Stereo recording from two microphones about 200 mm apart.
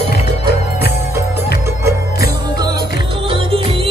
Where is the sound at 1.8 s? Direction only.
20° right (ahead or behind).